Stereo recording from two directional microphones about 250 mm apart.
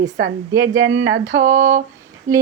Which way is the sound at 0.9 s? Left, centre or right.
Right.